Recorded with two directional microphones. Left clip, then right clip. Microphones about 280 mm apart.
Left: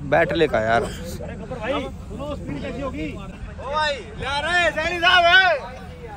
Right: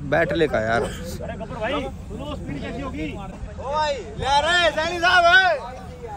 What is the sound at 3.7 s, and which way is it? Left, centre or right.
Speech, right.